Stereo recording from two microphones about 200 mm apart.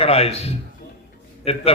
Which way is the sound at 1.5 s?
30° left (ahead or behind).